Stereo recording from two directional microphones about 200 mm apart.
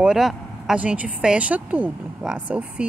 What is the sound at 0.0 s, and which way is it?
Speech, centre (ahead or behind).